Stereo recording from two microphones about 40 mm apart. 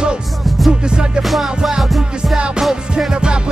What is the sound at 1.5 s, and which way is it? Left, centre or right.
Music, centre.